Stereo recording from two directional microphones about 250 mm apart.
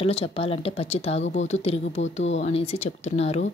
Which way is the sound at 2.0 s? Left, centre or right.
Left.